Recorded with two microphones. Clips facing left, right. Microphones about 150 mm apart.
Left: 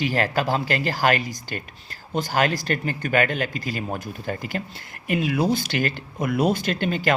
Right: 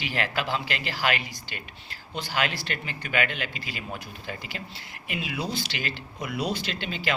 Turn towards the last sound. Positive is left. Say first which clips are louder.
# left 8 dB
turn(degrees=50)  # may be behind; listen again after turning